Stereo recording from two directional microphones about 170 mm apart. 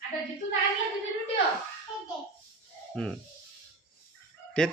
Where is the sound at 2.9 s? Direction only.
5° left (ahead or behind).